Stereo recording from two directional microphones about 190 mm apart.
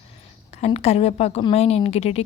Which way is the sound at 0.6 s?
35° left (ahead or behind).